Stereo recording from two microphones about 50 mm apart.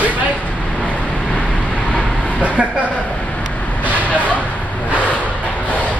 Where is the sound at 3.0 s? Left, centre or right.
Left.